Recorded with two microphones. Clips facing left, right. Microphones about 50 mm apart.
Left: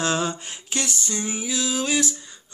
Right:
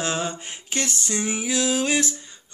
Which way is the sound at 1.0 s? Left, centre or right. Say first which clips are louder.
Right 2 dB; right.